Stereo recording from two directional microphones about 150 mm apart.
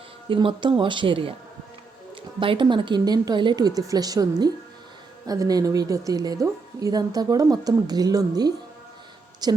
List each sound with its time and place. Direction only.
0.3 s speech: 35° right (ahead or behind)
2.4 s speech: 35° right (ahead or behind)